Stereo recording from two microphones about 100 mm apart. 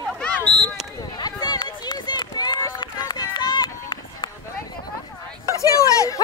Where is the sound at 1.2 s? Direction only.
45° left (ahead or behind).